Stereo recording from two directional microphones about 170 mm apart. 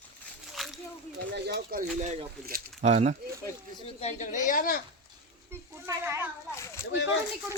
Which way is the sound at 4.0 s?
45° left (ahead or behind).